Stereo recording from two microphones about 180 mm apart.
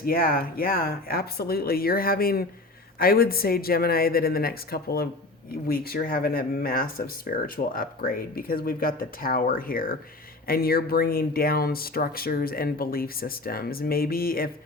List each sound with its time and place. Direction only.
0.0 s speech: 55° left (ahead or behind)